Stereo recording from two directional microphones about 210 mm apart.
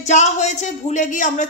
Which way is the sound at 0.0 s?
35° left (ahead or behind).